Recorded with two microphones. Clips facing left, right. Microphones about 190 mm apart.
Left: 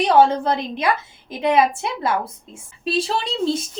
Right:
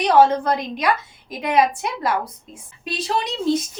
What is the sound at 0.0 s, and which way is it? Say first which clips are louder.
A woman's voice: even; 25° left (ahead or behind).